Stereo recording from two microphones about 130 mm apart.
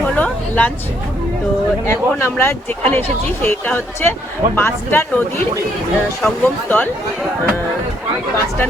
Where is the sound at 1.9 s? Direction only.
20° left (ahead or behind).